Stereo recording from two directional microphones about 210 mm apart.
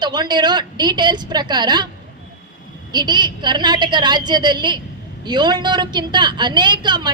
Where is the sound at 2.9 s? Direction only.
20° right (ahead or behind).